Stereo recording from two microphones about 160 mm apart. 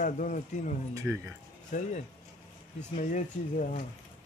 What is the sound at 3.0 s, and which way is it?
Speech, 50° left (ahead or behind).